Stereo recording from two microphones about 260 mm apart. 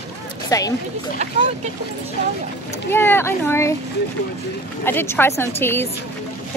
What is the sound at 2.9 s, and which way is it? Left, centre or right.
Speech, centre.